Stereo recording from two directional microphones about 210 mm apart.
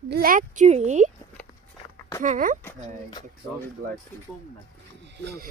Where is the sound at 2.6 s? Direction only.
20° left (ahead or behind).